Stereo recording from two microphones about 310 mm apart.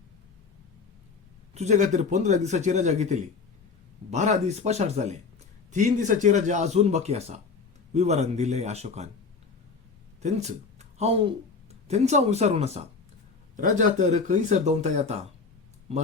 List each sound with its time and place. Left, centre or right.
1.5 s speech: right
10.2 s speech: right